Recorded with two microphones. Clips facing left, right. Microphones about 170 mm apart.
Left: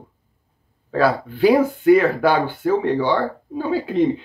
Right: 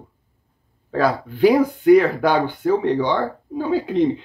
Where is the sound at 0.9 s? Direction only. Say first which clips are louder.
Left 1 dB; 10° left (ahead or behind).